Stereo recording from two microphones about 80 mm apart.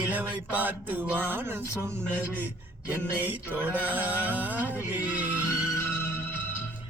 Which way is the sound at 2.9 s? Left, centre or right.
Right.